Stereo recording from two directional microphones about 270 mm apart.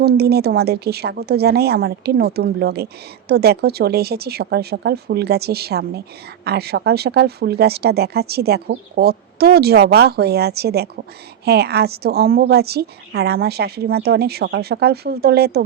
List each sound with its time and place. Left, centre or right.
0.0 s speech: right